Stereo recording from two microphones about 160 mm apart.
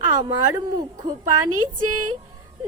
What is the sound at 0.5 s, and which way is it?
Speech, 25° right (ahead or behind).